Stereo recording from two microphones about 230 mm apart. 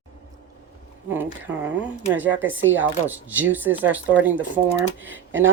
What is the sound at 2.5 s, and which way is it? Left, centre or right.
Speech, right.